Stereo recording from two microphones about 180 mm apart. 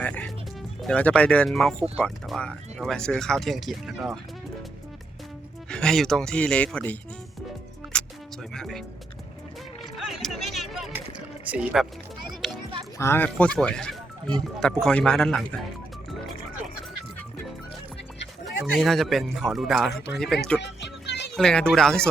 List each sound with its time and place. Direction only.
0.0 s music: 5° left (ahead or behind)
0.8 s speech: 5° left (ahead or behind)
5.6 s speech: 5° left (ahead or behind)
7.9 s music: 5° left (ahead or behind)
8.5 s speech: centre (ahead or behind)
10.0 s a sound: centre (ahead or behind)
11.4 s music: 5° right (ahead or behind)
13.0 s speech: 10° left (ahead or behind)
18.4 s speech: centre (ahead or behind)
20.6 s music: 70° left (ahead or behind)
21.3 s speech: 5° left (ahead or behind)